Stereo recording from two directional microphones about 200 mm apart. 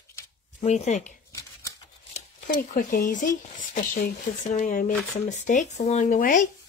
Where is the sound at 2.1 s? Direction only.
40° left (ahead or behind).